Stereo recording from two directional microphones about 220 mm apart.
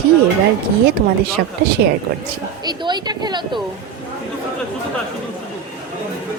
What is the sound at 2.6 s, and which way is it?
Speech, 20° right (ahead or behind).